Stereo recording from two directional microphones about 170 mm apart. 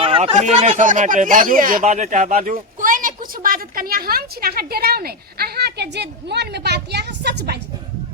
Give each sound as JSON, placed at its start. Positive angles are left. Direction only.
{"t": 0.0, "sound": "speech", "side_deg": -35}